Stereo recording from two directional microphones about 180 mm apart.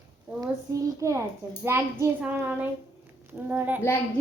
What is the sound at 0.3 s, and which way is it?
A child's voice, 20° right (ahead or behind).